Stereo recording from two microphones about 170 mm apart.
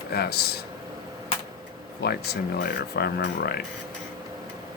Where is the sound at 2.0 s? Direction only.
75° left (ahead or behind).